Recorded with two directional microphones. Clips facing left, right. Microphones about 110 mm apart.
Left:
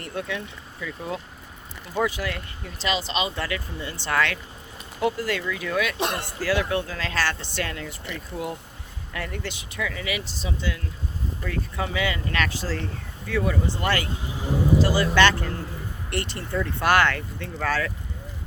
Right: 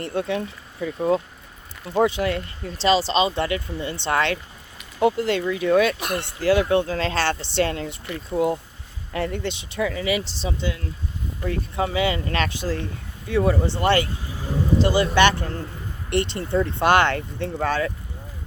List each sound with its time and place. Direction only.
0.0 s speech: 30° right (ahead or behind)
2.0 s speech: 30° right (ahead or behind)
6.0 s speech: 30° left (ahead or behind)
6.2 s speech: 25° right (ahead or behind)
13.4 s speech: 30° right (ahead or behind)
14.1 s vehicle: 20° left (ahead or behind)
14.8 s speech: 25° right (ahead or behind)
17.7 s speech: 25° right (ahead or behind)